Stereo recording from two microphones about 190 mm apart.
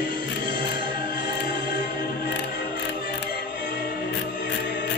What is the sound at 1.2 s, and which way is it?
Music, 60° left (ahead or behind).